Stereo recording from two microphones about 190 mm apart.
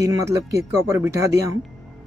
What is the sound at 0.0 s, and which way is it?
Speech, 15° right (ahead or behind).